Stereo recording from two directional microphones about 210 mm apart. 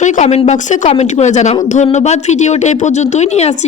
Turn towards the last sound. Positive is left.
turn(degrees=30)  # may be behind; listen again after turning